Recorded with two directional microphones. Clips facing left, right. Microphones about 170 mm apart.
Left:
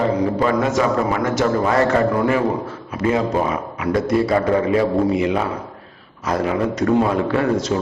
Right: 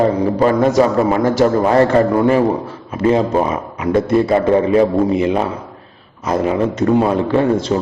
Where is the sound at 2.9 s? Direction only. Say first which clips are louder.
Right 5 dB; 30° right (ahead or behind).